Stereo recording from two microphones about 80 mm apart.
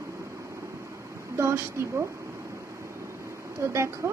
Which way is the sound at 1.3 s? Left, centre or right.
Right.